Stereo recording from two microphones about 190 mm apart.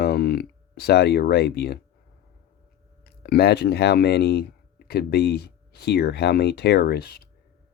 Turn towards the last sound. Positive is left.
turn(degrees=55)  # may be behind; listen again after turning